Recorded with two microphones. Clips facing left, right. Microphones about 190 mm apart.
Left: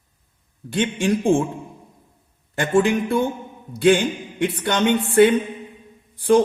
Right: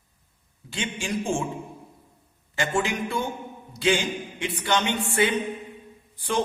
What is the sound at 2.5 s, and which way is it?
Speech, 55° left (ahead or behind).